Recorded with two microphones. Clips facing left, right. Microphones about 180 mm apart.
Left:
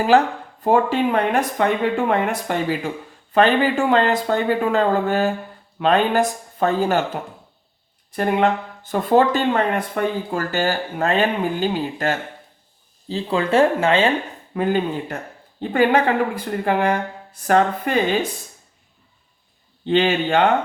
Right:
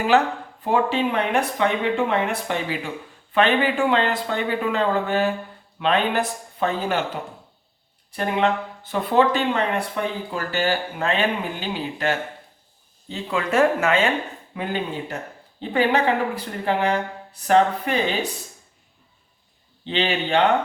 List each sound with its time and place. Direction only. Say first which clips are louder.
0.6 s speech: left 4 dB; 45° left (ahead or behind)
13.1 s speech: left 4 dB; 30° left (ahead or behind)
14.5 s speech: left 7 dB; 45° left (ahead or behind)
19.8 s speech: left 6 dB; 50° left (ahead or behind)